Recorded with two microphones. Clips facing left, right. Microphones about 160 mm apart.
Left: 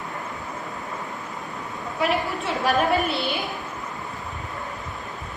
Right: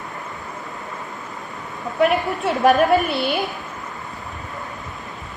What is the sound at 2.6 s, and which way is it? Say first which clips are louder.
Speech: right 6 dB; 50° right (ahead or behind).